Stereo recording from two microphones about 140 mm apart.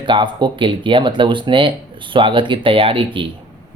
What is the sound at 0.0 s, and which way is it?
Speech, 35° right (ahead or behind).